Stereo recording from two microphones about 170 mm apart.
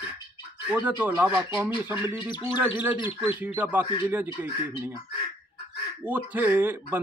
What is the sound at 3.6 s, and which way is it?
Speech, 10° right (ahead or behind).